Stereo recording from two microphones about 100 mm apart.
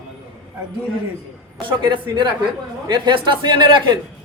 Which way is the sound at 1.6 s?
50° right (ahead or behind).